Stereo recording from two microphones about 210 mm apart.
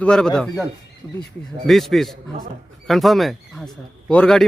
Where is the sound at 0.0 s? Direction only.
5° left (ahead or behind).